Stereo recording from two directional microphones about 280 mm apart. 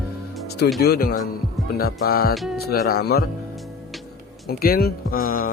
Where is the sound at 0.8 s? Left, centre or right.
Left.